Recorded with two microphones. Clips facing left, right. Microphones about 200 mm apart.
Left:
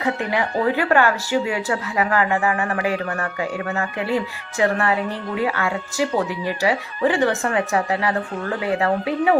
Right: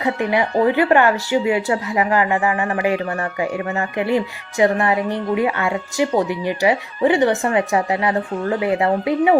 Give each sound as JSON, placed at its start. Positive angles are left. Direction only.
{"t": 0.0, "sound": "speech", "side_deg": -15}